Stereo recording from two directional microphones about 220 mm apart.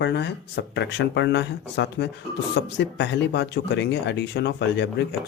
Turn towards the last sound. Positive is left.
turn(degrees=50)  # may be behind; listen again after turning